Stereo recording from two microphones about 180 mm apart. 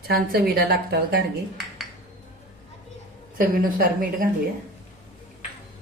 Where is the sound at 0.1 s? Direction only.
60° right (ahead or behind).